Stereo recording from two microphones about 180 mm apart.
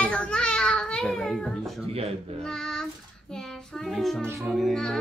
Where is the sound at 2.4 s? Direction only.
5° left (ahead or behind).